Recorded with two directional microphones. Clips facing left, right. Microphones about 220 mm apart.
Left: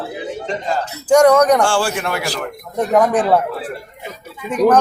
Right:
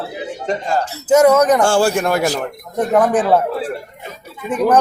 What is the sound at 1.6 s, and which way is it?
Speech, 45° right (ahead or behind).